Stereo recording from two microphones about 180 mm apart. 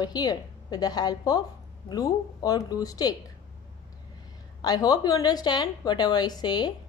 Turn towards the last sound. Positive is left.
turn(degrees=25)  # may be behind; listen again after turning